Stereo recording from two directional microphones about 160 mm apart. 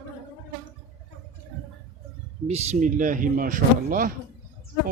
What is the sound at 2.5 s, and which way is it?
Speech, 45° right (ahead or behind).